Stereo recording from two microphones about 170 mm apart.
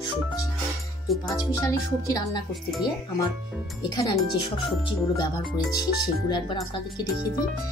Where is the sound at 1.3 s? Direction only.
20° left (ahead or behind).